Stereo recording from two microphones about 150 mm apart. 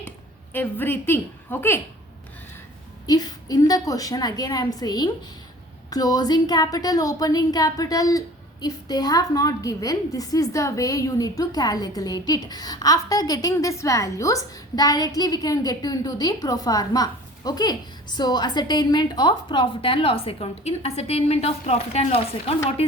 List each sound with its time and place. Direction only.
0.5 s a woman's voice: 15° left (ahead or behind)
3.1 s a woman's voice: 25° left (ahead or behind); by 22.5 s 40° left (ahead or behind)